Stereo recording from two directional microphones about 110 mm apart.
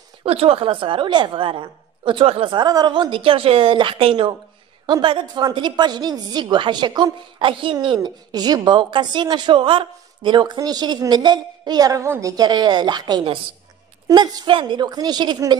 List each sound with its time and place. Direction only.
0.2 s a woman's voice: 65° right (ahead or behind)
2.5 s a woman's voice: 40° right (ahead or behind)